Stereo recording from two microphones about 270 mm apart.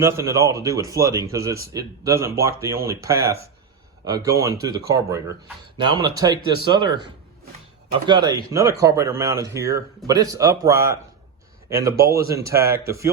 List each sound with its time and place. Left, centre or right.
0.0 s speech: centre
8.0 s speech: centre